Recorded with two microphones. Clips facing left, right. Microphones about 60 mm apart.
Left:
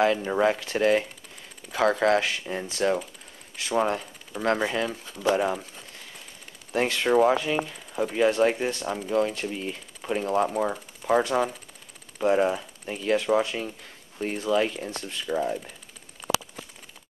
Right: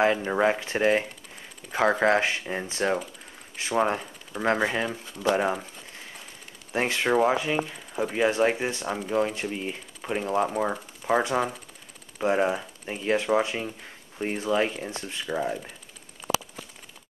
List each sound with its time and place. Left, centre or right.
0.0 s speech: right
6.7 s speech: centre